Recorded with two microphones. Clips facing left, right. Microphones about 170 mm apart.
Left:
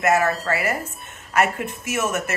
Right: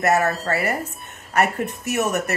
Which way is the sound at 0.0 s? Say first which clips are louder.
Even; 40° right (ahead or behind).